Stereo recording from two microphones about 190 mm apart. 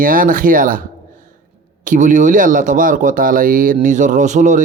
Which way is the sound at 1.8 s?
40° right (ahead or behind).